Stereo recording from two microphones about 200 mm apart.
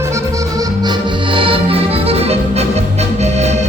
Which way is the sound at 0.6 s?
25° right (ahead or behind).